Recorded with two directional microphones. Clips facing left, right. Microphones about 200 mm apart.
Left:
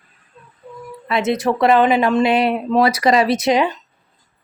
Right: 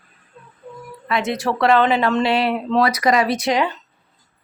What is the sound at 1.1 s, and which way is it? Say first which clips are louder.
A woman's voice: left 3 dB; 25° left (ahead or behind).